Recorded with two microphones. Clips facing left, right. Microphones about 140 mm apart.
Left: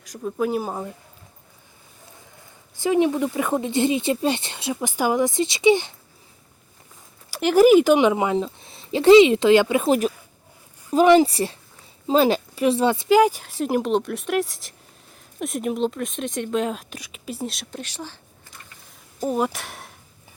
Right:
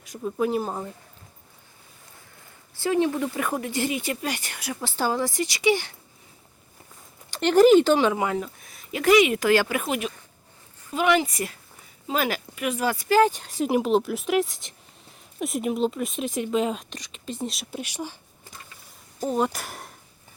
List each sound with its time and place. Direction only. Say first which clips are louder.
0.0 s speech: left 1 dB; centre (ahead or behind)
2.7 s speech: left 3 dB; 15° left (ahead or behind)
7.3 s speech: left 1 dB; 5° left (ahead or behind)
7.9 s speech: left 4 dB; 20° left (ahead or behind)
10.9 s speech: left 8 dB; 35° left (ahead or behind); by 18.2 s 10° right (ahead or behind)
19.2 s speech: left 1 dB; 5° left (ahead or behind)